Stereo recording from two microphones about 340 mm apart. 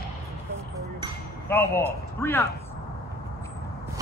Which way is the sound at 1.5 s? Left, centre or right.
Centre.